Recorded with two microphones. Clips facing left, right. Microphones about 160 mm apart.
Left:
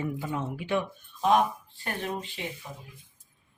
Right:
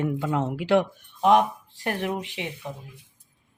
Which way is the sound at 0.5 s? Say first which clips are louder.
Right 8 dB; 90° right.